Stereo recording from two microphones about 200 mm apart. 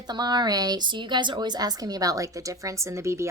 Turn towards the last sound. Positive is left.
turn(degrees=-15)  # may be behind; listen again after turning